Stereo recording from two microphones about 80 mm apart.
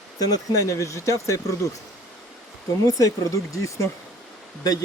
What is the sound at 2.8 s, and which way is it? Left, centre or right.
Speech, left.